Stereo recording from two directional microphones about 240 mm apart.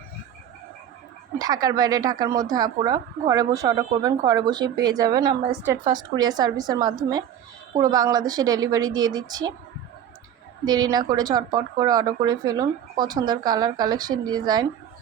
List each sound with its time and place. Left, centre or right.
1.4 s a woman's voice: centre
10.7 s a woman's voice: centre